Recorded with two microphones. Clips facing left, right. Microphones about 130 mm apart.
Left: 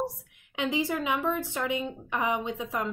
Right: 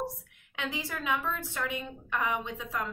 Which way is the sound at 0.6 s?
15° left (ahead or behind).